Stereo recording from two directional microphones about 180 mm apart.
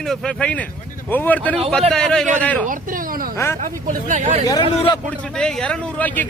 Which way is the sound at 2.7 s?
50° right (ahead or behind).